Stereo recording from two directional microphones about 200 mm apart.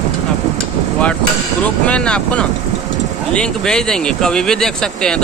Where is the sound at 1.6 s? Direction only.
5° left (ahead or behind).